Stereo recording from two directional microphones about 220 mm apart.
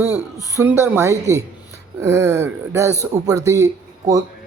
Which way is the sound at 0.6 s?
10° right (ahead or behind).